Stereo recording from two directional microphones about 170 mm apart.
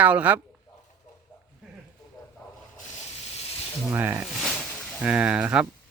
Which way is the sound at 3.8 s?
10° right (ahead or behind).